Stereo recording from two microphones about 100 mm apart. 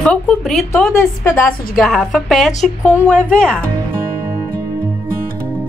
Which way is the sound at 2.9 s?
20° right (ahead or behind).